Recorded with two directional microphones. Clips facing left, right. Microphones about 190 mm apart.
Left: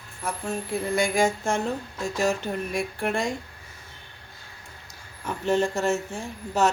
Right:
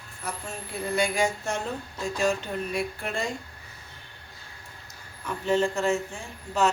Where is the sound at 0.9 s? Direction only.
45° left (ahead or behind).